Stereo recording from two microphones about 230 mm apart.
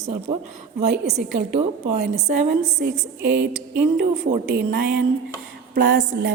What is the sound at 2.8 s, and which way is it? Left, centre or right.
A woman's voice, right.